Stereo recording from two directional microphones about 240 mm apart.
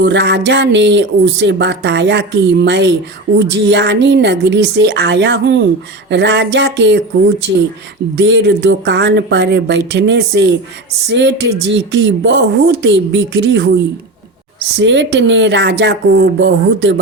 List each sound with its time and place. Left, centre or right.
0.0 s speech: right
8.1 s speech: right